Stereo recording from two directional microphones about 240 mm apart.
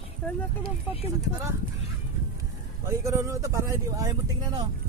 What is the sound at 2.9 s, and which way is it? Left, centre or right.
Speech, centre.